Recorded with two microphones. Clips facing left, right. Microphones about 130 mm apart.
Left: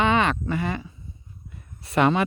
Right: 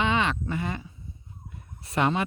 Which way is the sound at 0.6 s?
90° left.